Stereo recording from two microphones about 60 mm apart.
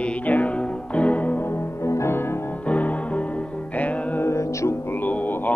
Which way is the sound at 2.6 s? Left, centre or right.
Left.